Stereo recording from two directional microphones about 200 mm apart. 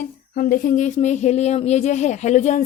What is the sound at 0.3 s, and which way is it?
Speech, 45° left (ahead or behind).